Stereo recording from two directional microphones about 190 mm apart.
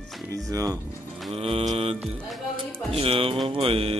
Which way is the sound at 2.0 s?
Centre (ahead or behind).